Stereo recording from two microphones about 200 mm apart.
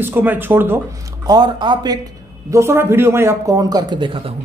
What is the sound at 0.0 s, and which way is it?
A man's voice, 10° right (ahead or behind).